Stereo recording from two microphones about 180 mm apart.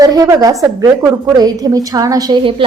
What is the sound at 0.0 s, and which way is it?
A woman's voice, 20° right (ahead or behind).